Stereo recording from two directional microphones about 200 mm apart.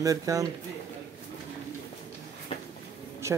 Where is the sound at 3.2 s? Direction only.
15° right (ahead or behind).